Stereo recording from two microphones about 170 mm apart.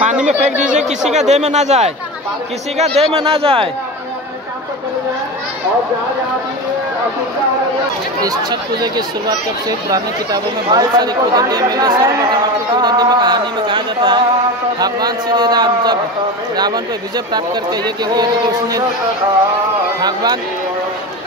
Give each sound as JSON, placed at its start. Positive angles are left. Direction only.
{"t": 0.6, "sound": "speech", "side_deg": -45}
{"t": 8.2, "sound": "speech", "side_deg": -20}
{"t": 17.8, "sound": "speech", "side_deg": -25}
{"t": 20.0, "sound": "speech", "side_deg": -25}